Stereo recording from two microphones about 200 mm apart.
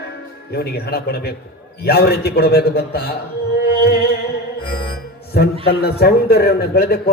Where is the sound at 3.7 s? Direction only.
50° left (ahead or behind).